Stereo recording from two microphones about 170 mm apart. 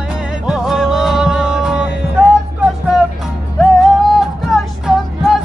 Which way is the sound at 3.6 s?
Centre (ahead or behind).